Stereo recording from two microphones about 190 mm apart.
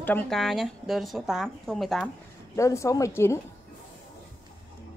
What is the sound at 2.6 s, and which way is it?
Speech, 15° left (ahead or behind).